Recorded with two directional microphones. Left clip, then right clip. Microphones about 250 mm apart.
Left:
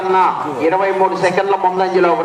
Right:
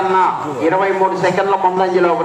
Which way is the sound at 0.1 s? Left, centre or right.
Left.